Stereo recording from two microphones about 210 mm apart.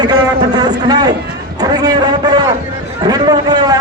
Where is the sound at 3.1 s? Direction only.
20° right (ahead or behind).